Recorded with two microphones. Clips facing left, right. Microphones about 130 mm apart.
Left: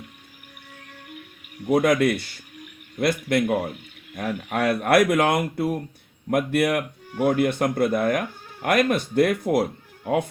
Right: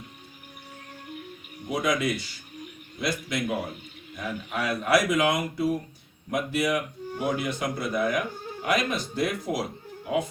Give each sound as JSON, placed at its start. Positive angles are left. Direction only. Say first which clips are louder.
{"t": 1.7, "sound": "speech", "louder": "left 7 dB", "side_deg": 55}